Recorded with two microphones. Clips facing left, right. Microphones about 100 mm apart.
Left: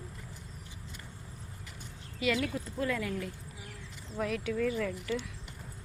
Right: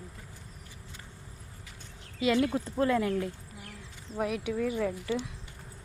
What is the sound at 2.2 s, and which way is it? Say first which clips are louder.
Speech: right 5 dB; 25° right (ahead or behind).